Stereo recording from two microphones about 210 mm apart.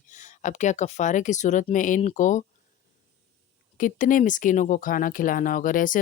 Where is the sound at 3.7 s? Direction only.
40° left (ahead or behind).